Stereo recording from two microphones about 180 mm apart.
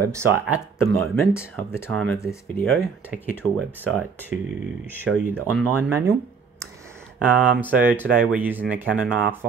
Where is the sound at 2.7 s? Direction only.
5° right (ahead or behind).